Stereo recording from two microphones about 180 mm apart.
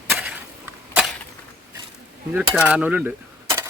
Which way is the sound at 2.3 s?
10° right (ahead or behind).